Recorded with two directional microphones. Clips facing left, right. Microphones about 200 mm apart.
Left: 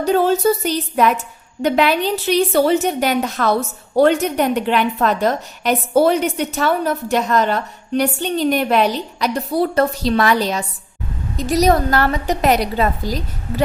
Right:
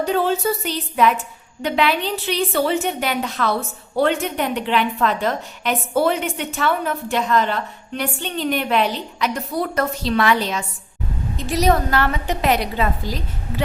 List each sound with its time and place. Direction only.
0.0 s a woman's voice: 40° left (ahead or behind)